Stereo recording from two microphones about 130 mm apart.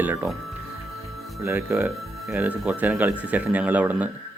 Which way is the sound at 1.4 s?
15° right (ahead or behind).